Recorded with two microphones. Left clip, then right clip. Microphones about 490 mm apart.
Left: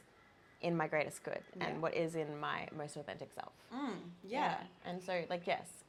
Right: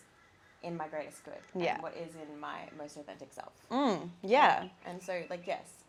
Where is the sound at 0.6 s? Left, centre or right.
Left.